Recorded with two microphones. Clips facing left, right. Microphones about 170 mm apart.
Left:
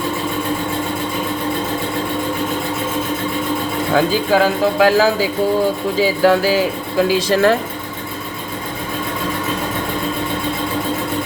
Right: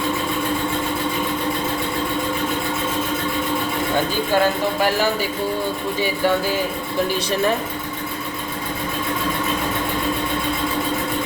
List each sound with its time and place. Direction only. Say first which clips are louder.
3.9 s speech: left 6 dB; 90° left